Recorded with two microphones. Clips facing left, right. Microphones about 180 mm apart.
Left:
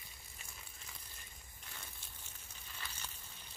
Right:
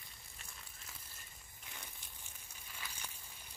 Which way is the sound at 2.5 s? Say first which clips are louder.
Even; 10° right (ahead or behind).